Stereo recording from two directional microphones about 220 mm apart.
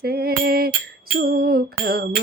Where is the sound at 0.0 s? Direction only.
45° right (ahead or behind).